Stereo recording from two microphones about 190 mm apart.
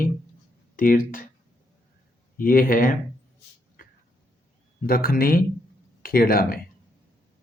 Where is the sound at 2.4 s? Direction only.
50° left (ahead or behind).